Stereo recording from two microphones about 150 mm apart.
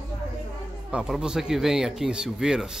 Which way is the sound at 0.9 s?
5° right (ahead or behind).